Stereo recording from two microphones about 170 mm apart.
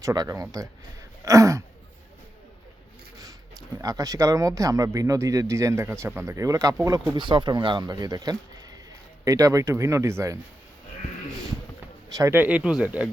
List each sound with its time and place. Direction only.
0.0 s speech: 20° right (ahead or behind)
3.2 s speech: 20° right (ahead or behind)
12.0 s speech: 20° right (ahead or behind)